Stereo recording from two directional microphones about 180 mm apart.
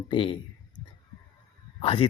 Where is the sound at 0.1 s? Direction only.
25° left (ahead or behind).